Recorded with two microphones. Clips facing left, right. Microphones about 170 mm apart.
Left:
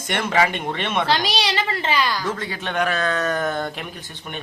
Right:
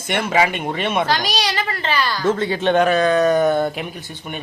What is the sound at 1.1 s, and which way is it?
A child's voice, 25° left (ahead or behind).